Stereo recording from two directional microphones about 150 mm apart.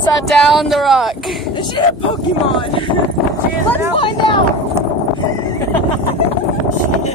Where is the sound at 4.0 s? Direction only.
35° left (ahead or behind).